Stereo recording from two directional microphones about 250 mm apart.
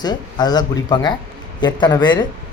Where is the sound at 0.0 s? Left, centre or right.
Centre.